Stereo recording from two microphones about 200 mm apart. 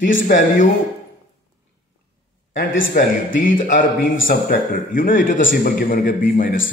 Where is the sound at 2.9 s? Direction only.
45° left (ahead or behind).